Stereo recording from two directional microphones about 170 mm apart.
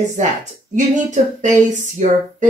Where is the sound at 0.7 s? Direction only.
45° right (ahead or behind).